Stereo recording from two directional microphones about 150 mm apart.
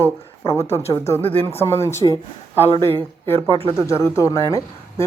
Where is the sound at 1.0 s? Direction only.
20° left (ahead or behind).